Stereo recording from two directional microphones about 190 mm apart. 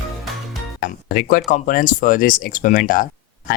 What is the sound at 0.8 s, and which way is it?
Speech, 55° left (ahead or behind).